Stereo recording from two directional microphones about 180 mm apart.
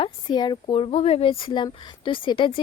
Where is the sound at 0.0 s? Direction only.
25° left (ahead or behind).